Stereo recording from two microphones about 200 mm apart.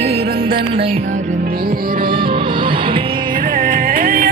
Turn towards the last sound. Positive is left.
turn(degrees=-45)  # may be behind; listen again after turning